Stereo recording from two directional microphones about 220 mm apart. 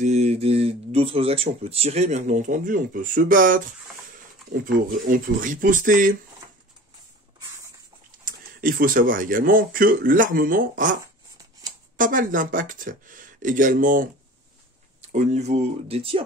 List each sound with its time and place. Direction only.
0.0 s speech: 30° right (ahead or behind)
4.6 s speech: 40° right (ahead or behind)
8.3 s speech: 40° right (ahead or behind)
12.0 s speech: 40° right (ahead or behind)